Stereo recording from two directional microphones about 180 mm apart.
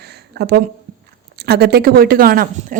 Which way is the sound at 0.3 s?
65° right (ahead or behind).